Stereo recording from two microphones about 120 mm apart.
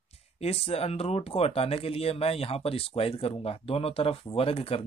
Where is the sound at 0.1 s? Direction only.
60° left (ahead or behind).